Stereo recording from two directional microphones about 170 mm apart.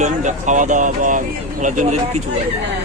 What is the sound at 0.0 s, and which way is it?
Speech, 45° right (ahead or behind).